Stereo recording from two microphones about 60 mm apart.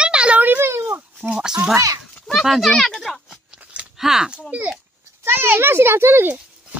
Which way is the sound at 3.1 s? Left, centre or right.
Centre.